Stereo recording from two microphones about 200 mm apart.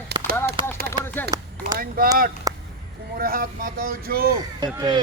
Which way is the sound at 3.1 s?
45° right (ahead or behind).